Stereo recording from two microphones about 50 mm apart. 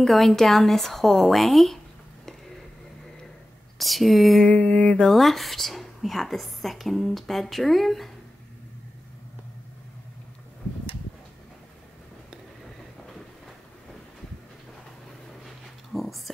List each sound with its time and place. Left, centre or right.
0.0 s a woman's voice: centre
3.7 s a woman's voice: centre
4.5 s mantra: left
5.0 s a woman's voice: centre
15.9 s a sound: centre